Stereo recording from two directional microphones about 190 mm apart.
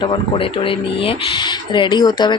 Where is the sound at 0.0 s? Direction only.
25° left (ahead or behind).